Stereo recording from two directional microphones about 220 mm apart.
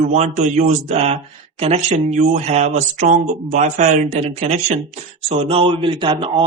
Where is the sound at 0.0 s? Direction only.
30° right (ahead or behind).